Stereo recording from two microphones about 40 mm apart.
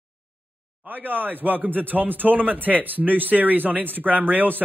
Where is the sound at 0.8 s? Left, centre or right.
Right.